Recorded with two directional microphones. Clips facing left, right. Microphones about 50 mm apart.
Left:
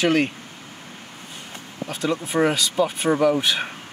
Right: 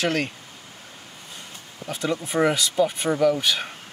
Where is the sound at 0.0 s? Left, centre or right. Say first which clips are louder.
Left 5 dB; left.